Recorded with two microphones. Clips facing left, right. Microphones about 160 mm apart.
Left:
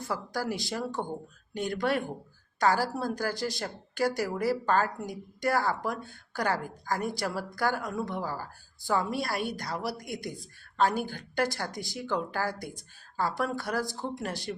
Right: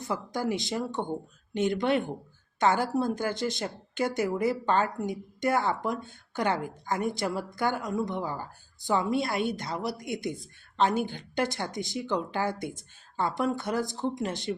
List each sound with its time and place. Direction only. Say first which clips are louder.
0.0 s a woman's voice: right 2 dB; 20° right (ahead or behind)